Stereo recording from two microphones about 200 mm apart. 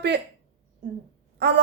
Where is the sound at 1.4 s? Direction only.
55° right (ahead or behind).